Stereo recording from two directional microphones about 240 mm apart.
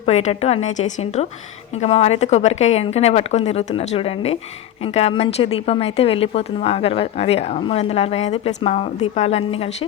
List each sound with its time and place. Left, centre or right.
0.0 s speech: left